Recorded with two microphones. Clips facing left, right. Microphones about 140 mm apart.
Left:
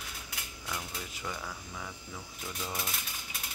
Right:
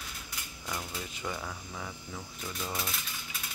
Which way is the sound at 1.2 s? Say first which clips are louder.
Right 2 dB; 15° right (ahead or behind).